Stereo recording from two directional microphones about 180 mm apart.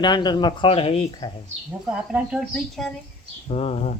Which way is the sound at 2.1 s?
5° right (ahead or behind).